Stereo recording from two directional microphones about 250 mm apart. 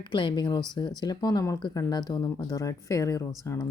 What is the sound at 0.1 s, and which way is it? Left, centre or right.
Speech, centre.